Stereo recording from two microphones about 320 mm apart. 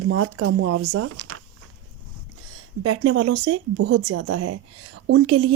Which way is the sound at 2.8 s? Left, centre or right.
Right.